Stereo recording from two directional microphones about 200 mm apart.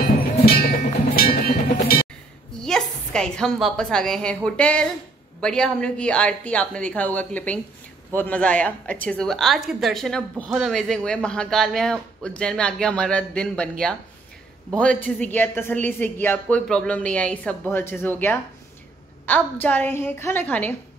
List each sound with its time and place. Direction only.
0.5 s music: 50° left (ahead or behind)
2.6 s a woman's voice: 5° left (ahead or behind)
19.2 s a woman's voice: 10° left (ahead or behind)